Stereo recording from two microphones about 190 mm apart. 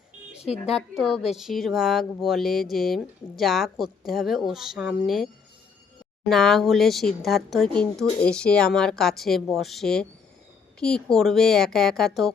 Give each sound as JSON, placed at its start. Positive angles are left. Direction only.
{"t": 0.4, "sound": "a woman's voice", "side_deg": 35}
{"t": 0.7, "sound": "speech", "side_deg": 0}